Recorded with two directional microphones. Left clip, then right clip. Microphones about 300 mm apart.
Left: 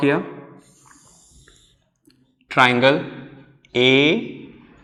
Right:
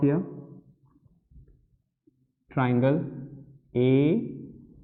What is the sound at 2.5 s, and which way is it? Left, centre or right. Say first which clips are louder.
A man's voice: left 11 dB; centre.